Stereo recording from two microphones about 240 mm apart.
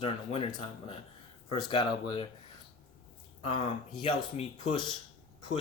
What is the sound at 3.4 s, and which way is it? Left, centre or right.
Speech, left.